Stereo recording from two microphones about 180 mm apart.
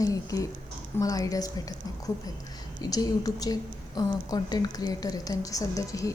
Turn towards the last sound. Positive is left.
turn(degrees=20)  # may be behind; listen again after turning